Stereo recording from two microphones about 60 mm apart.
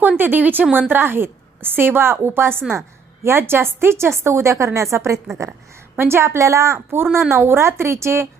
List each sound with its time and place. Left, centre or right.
0.2 s a woman's voice: right
6.0 s a woman's voice: right
6.7 s a woman's voice: right